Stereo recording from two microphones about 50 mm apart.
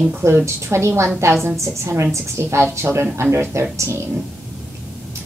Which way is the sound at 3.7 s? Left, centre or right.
Right.